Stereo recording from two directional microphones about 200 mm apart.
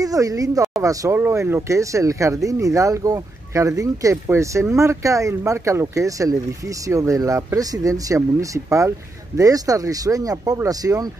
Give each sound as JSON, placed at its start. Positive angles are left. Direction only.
{"t": 0.0, "sound": "speech", "side_deg": -15}